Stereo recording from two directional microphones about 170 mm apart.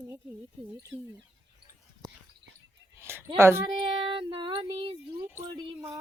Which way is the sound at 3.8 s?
30° right (ahead or behind).